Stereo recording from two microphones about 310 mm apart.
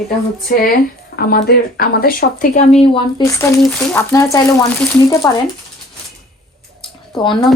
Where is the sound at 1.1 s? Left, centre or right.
Left; by 5.1 s centre.